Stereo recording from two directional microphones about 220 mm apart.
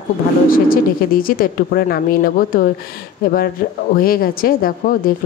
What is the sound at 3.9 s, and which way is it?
Speech, 40° left (ahead or behind).